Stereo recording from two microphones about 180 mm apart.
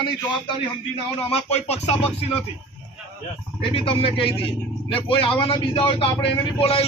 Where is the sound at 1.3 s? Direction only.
35° left (ahead or behind).